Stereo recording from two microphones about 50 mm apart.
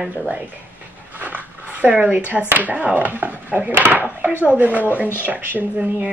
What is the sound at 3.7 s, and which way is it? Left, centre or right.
Dishes, right.